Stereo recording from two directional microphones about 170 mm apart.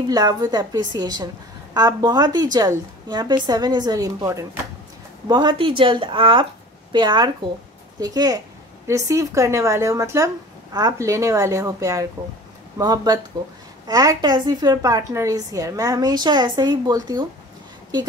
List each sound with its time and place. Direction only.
0.1 s a woman's voice: 20° right (ahead or behind)